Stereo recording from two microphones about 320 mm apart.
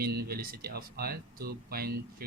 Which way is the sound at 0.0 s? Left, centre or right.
Right.